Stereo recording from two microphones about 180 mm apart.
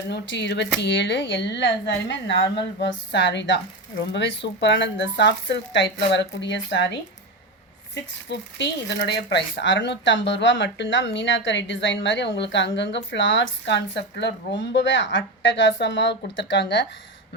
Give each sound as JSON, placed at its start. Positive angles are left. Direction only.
{"t": 0.1, "sound": "speech", "side_deg": 75}
{"t": 2.8, "sound": "speech", "side_deg": 75}
{"t": 8.3, "sound": "speech", "side_deg": 75}